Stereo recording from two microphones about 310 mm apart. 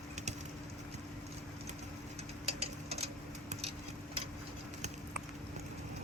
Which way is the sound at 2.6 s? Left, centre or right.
Centre.